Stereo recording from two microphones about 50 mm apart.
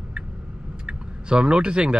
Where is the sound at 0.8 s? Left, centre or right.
Centre.